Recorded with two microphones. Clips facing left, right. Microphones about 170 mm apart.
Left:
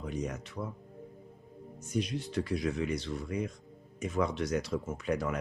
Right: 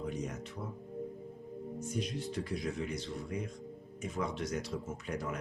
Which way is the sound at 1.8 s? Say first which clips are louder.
Left 5 dB; 75° left (ahead or behind).